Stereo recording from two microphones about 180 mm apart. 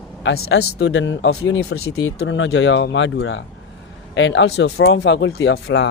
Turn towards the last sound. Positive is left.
turn(degrees=80)